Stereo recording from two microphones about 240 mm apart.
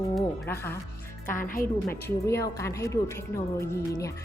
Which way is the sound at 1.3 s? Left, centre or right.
Left.